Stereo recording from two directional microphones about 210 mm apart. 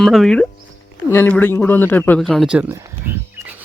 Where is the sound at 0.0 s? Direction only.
Centre (ahead or behind).